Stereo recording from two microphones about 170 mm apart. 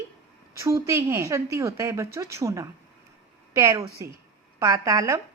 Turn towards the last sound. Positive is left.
turn(degrees=-20)  # may be behind; listen again after turning